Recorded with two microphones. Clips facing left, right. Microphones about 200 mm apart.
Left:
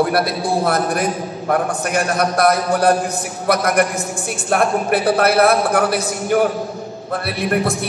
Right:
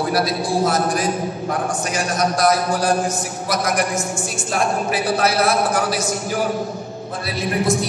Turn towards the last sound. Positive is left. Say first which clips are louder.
# left 1 dB
turn(degrees=60)  # may be behind; listen again after turning